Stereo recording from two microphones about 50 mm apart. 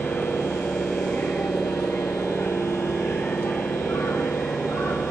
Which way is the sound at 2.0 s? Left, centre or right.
Left.